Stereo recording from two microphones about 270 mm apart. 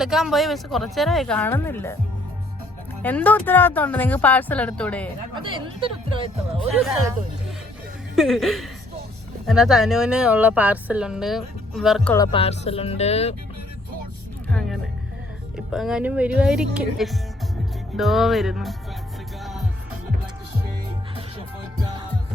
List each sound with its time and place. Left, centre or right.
0.0 s a woman's voice: centre
3.0 s speech: centre
5.3 s speech: centre
8.1 s a woman's voice: centre
12.1 s speech: centre
14.5 s music: centre
15.5 s a woman's voice: centre
19.4 s music: centre